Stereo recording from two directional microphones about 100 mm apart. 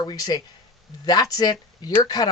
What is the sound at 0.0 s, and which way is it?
Speech, 40° left (ahead or behind).